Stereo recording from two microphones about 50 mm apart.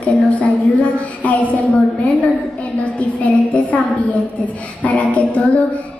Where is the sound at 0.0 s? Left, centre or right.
Left.